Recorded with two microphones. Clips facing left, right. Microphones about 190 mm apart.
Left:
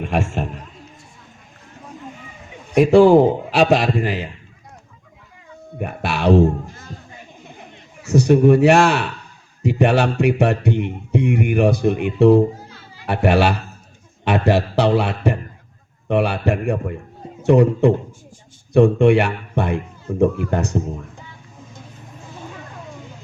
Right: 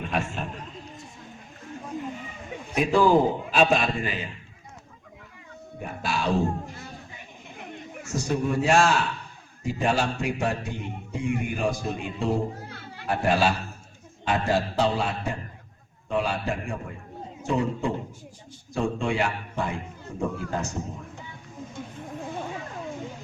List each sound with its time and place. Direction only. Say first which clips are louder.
0.0 s speech: left 7 dB; 70° left (ahead or behind)
2.7 s a man's voice: left 9 dB; 75° left (ahead or behind)
5.8 s speech: left 8 dB; 65° left (ahead or behind)
8.0 s speech: left 14 dB; 70° left (ahead or behind)
12.5 s music: right 1 dB; 60° right (ahead or behind)
13.1 s a man's voice: left 6 dB; 70° left (ahead or behind)